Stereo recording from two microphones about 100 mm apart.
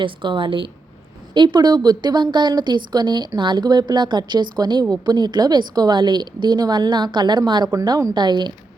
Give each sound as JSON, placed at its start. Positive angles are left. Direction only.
{"t": 0.0, "sound": "a woman's voice", "side_deg": -55}